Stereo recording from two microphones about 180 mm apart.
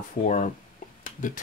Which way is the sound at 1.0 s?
45° left (ahead or behind).